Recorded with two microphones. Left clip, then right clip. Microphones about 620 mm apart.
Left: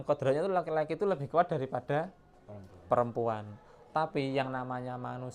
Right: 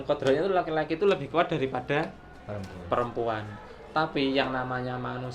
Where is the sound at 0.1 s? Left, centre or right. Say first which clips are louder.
Right 4 dB; left.